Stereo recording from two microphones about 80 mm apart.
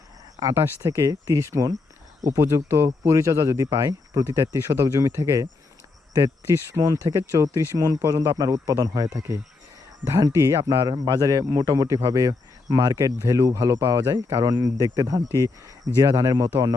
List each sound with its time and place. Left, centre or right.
0.8 s speech: right
10.1 s speech: right
10.7 s a man's voice: right